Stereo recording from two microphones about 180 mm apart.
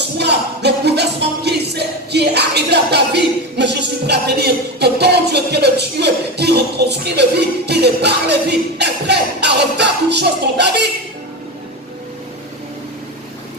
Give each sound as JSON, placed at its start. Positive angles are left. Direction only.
{"t": 0.2, "sound": "music", "side_deg": -70}